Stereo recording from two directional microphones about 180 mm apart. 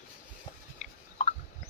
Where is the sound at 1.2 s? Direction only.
35° left (ahead or behind).